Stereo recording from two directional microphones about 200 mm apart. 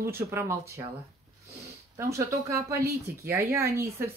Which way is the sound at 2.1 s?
15° right (ahead or behind).